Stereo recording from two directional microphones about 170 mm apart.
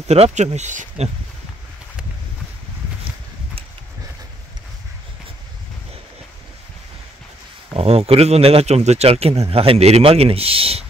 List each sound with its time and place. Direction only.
0.1 s speech: 40° right (ahead or behind)
7.7 s speech: 35° right (ahead or behind)